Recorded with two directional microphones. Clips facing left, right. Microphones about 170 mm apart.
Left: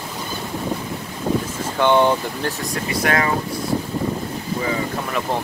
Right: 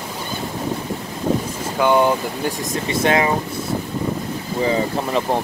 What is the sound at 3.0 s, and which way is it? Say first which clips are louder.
Speech: right 3 dB; 20° right (ahead or behind).